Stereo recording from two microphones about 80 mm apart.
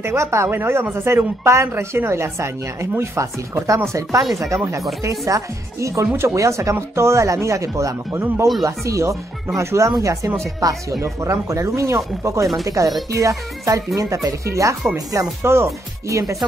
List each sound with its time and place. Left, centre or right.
0.0 s speech: right
4.2 s speech: centre
5.2 s speech: right